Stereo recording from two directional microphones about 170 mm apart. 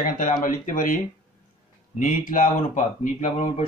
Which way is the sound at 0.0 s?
50° left (ahead or behind).